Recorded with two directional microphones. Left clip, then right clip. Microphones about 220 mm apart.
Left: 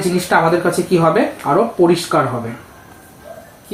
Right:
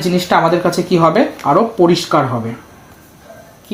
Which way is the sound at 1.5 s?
40° right (ahead or behind).